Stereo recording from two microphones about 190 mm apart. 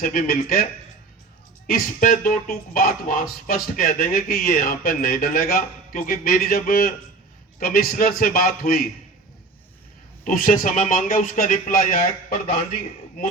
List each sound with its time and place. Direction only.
0.0 s speech: 45° left (ahead or behind)
1.6 s speech: 50° left (ahead or behind)
10.2 s speech: 45° left (ahead or behind)